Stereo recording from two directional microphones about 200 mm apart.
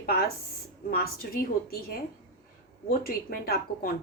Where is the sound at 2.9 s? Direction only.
45° left (ahead or behind).